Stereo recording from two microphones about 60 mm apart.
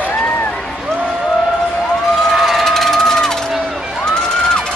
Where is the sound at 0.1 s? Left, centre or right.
Left.